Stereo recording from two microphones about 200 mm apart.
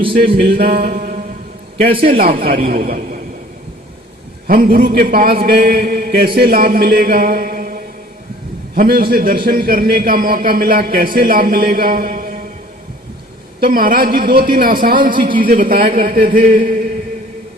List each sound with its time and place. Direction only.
0.4 s a man's voice: 50° right (ahead or behind)
1.9 s a man's voice: 30° right (ahead or behind)
2.6 s a man's voice: 45° right (ahead or behind)
4.4 s a man's voice: 45° right (ahead or behind)
13.6 s a man's voice: 45° right (ahead or behind)